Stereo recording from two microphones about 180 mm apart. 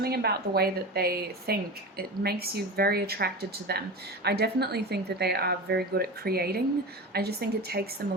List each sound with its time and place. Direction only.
0.0 s speech: 60° right (ahead or behind)